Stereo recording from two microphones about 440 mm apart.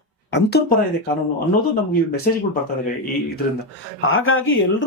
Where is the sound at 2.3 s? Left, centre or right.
Centre.